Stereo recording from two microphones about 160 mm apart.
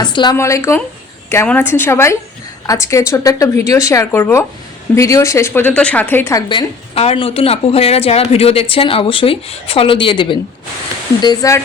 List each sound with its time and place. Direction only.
0.0 s a woman's voice: 30° left (ahead or behind)
6.5 s a woman's voice: 35° left (ahead or behind)